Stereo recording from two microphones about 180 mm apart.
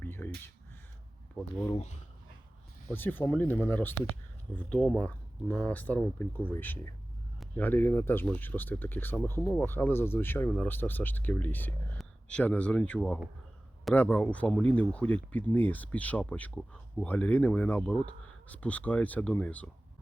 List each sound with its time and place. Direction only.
0.0 s a sound: 10° left (ahead or behind)
1.4 s speech: centre (ahead or behind)
1.7 s speech: 40° left (ahead or behind)
2.9 s speech: 10° left (ahead or behind)